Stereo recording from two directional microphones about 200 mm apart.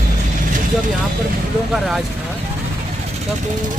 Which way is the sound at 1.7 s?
Centre (ahead or behind).